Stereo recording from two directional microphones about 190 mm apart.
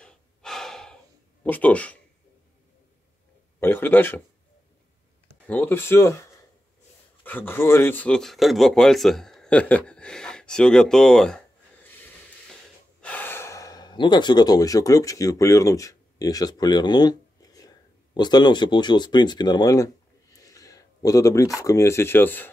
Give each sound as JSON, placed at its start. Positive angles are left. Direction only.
{"t": 0.0, "sound": "breathing", "side_deg": 5}
{"t": 1.4, "sound": "a man's voice", "side_deg": 10}
{"t": 3.5, "sound": "a man's voice", "side_deg": 10}
{"t": 5.5, "sound": "a man's voice", "side_deg": 10}
{"t": 7.2, "sound": "speech", "side_deg": 10}